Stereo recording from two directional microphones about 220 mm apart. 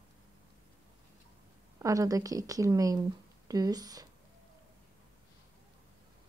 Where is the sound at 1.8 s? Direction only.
15° right (ahead or behind).